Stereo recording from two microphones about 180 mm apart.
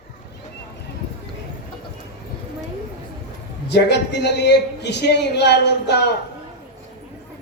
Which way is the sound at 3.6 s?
65° left (ahead or behind).